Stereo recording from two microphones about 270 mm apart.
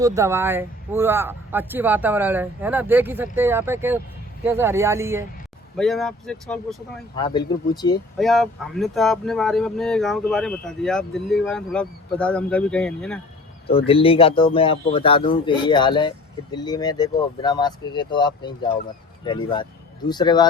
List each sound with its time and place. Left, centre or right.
0.0 s speech: centre
5.7 s speech: centre
7.2 s speech: centre
8.2 s speech: centre
13.7 s speech: left